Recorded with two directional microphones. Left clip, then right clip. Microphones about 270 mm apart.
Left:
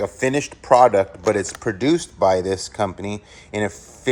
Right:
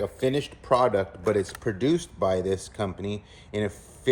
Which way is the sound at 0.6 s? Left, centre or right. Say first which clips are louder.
Left 9 dB; left.